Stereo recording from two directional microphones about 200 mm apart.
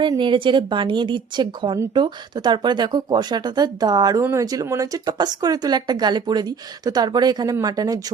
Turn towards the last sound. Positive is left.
turn(degrees=-20)  # may be behind; listen again after turning